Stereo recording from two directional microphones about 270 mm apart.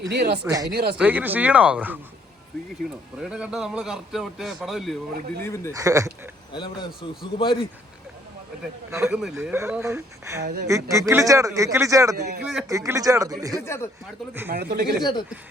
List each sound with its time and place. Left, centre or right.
0.1 s speech: right
0.4 s speech: centre
0.7 s speech: right
0.9 s a man's voice: centre
3.2 s a man's voice: centre
5.7 s speech: centre
6.5 s a man's voice: centre
8.9 s speech: centre
10.4 s speech: right
10.7 s speech: centre
12.1 s speech: right
12.4 s speech: centre
13.6 s a man's voice: centre
14.5 s speech: right